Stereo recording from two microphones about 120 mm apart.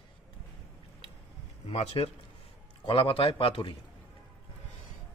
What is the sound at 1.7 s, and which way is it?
Speech, 60° left (ahead or behind).